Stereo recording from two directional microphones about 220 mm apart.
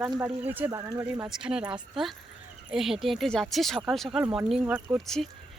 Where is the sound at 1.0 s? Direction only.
5° right (ahead or behind).